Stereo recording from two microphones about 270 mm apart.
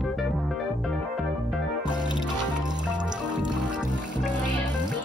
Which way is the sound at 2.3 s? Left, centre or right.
Centre.